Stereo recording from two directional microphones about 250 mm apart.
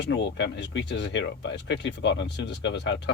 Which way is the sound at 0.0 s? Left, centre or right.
Left.